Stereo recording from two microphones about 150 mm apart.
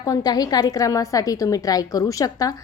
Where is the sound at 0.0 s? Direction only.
25° left (ahead or behind).